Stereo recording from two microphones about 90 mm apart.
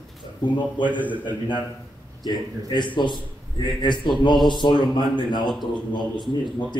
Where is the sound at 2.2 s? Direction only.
55° left (ahead or behind).